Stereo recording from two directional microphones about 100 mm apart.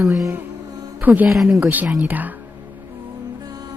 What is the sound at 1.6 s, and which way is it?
Speech, 15° right (ahead or behind).